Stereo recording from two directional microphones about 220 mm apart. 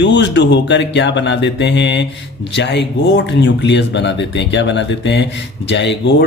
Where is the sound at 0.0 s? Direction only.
50° left (ahead or behind).